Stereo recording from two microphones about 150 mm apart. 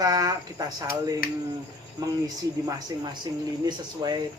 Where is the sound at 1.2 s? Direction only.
80° left.